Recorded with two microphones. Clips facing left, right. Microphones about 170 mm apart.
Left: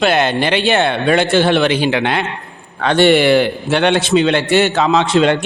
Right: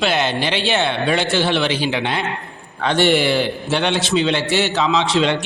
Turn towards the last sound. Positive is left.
turn(degrees=50)  # may be behind; listen again after turning